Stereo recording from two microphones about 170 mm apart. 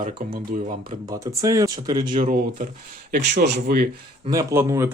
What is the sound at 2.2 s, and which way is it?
Speech, 50° right (ahead or behind).